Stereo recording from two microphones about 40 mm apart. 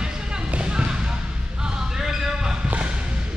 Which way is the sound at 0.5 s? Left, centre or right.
Right.